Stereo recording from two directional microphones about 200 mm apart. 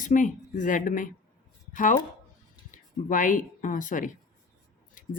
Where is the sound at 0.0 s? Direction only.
40° left (ahead or behind).